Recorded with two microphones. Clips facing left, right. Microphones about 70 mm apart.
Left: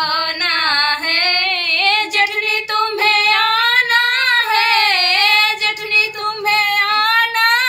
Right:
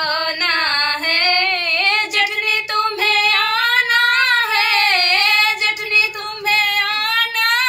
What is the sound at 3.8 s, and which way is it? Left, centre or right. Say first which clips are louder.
Singing: even; left.